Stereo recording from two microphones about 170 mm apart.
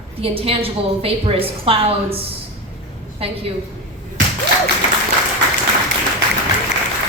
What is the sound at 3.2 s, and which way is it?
Speech, 35° right (ahead or behind).